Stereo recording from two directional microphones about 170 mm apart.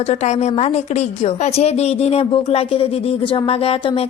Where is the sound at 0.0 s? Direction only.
40° left (ahead or behind).